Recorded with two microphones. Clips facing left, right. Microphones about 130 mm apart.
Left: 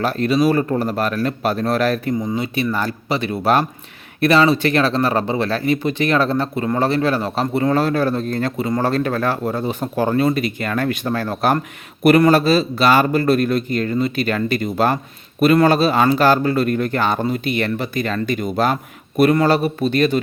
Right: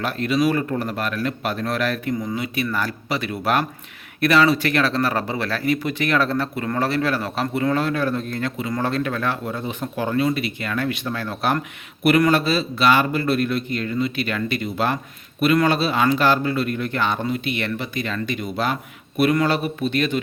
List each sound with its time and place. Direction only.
0.0 s speech: 35° left (ahead or behind)
2.1 s speech: 25° left (ahead or behind); by 20.2 s 40° left (ahead or behind)